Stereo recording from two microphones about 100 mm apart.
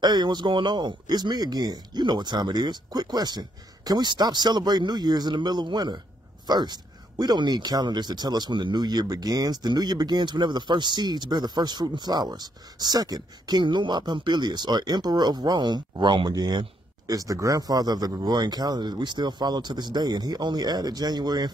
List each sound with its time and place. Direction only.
0.0 s a man's voice: 45° right (ahead or behind)